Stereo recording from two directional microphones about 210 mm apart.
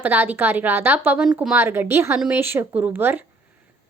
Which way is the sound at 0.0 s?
10° right (ahead or behind).